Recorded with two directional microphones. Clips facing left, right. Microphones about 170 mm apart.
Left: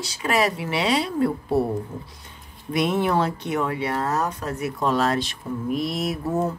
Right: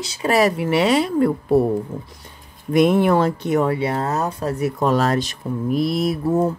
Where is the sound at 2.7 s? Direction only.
50° right (ahead or behind).